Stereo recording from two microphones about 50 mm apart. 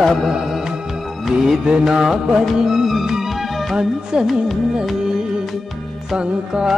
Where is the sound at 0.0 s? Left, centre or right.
Centre.